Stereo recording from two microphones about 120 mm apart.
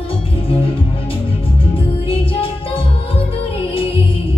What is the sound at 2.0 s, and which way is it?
Music, 50° left (ahead or behind).